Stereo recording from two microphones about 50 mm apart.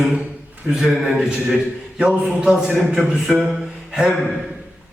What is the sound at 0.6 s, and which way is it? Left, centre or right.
Speech, centre.